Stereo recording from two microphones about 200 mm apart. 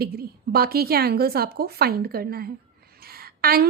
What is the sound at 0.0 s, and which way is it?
A woman's voice, 50° right (ahead or behind).